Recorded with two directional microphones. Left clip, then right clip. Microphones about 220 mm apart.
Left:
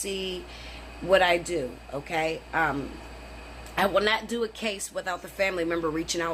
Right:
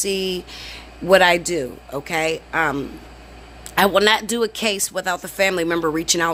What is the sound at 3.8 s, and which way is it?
Speech, 50° right (ahead or behind).